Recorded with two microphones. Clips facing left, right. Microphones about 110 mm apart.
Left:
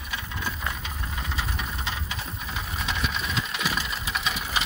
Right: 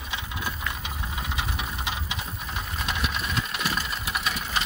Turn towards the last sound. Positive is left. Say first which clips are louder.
# even
turn(degrees=0)  # may be behind; listen again after turning